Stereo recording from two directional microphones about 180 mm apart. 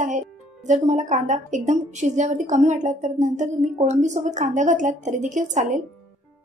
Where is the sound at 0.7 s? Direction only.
40° right (ahead or behind).